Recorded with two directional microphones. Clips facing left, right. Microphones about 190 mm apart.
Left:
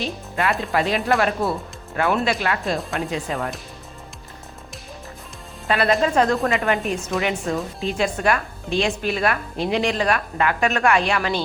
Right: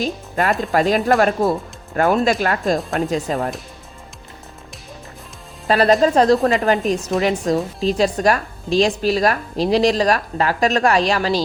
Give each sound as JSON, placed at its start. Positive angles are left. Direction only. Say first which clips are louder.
{"t": 0.0, "sound": "speech", "louder": "right 4 dB", "side_deg": -40}
{"t": 5.6, "sound": "speech", "louder": "right 5 dB", "side_deg": -40}